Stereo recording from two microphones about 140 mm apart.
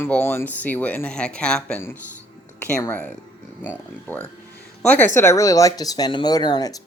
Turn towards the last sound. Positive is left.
turn(degrees=30)  # may be behind; listen again after turning